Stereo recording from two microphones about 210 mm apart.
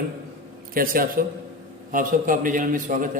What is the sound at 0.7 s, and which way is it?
A man's voice, 40° right (ahead or behind).